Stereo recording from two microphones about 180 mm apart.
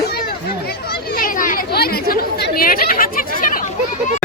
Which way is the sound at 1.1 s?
50° left (ahead or behind).